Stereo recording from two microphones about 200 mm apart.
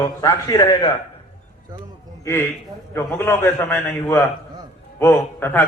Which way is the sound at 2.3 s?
10° left (ahead or behind).